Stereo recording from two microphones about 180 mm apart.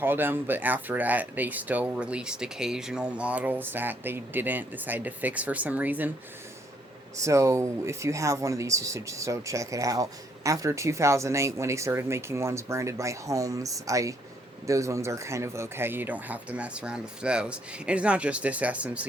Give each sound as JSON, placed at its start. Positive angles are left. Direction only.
{"t": 0.0, "sound": "speech", "side_deg": -10}
{"t": 7.2, "sound": "speech", "side_deg": -15}